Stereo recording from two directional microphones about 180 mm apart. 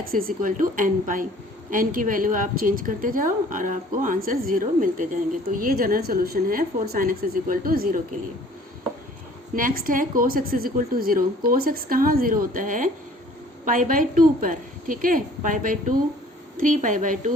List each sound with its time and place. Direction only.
0.1 s a woman's voice: 50° right (ahead or behind)
9.6 s a woman's voice: 50° right (ahead or behind)